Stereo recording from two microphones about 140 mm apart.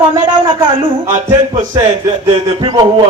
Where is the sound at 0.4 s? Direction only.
35° right (ahead or behind).